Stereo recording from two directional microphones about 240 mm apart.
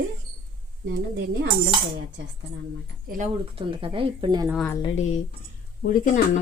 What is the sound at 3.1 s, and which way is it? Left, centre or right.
A woman's voice, right.